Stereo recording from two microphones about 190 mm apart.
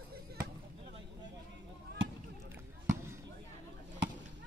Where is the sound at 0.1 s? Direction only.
55° right (ahead or behind).